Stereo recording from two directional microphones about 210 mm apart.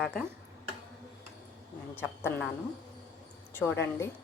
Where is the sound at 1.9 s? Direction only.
10° left (ahead or behind).